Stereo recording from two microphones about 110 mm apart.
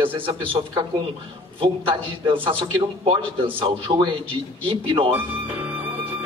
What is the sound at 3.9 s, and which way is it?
A man's voice, 45° right (ahead or behind).